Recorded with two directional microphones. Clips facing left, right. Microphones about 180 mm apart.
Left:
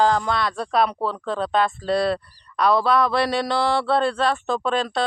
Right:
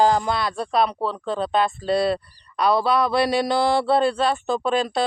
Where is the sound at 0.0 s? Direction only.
10° right (ahead or behind).